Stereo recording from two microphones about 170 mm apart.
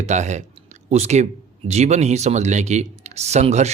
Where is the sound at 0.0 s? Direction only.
45° right (ahead or behind).